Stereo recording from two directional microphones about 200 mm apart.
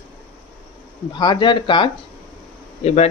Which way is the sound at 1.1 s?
20° left (ahead or behind).